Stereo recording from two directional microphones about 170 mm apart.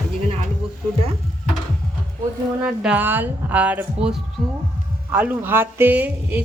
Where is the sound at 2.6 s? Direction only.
10° right (ahead or behind).